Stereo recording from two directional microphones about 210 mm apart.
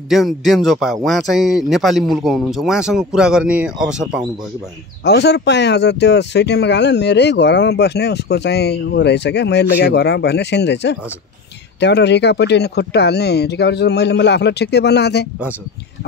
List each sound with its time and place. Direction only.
0.1 s a man's voice: centre (ahead or behind)
5.0 s speech: 55° left (ahead or behind)